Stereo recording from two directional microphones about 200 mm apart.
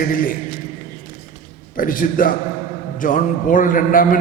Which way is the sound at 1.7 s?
45° left (ahead or behind).